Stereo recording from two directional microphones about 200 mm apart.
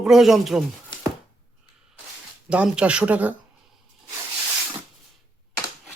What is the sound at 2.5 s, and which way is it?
Speech, 5° right (ahead or behind).